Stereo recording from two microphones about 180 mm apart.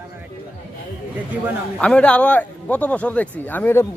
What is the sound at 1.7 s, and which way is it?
A man's voice, 5° left (ahead or behind).